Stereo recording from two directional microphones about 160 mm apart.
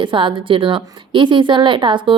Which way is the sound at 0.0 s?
30° right (ahead or behind).